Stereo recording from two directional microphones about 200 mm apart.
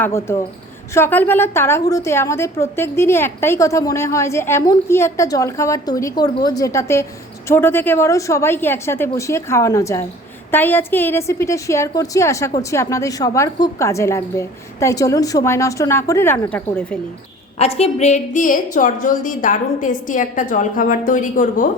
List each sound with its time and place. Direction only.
0.0 s a woman's voice: 15° left (ahead or behind)
17.6 s a woman's voice: 30° left (ahead or behind)